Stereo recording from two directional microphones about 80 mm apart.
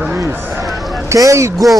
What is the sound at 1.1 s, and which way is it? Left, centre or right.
Speech, right.